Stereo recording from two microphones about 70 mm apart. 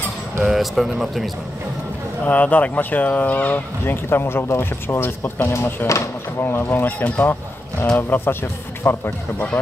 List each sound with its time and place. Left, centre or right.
0.4 s speech: centre
2.2 s speech: left